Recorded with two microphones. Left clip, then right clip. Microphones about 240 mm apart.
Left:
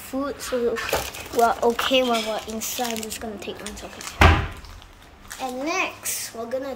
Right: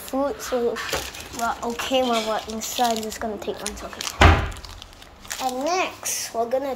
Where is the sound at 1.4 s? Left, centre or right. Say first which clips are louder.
Left 3 dB; centre.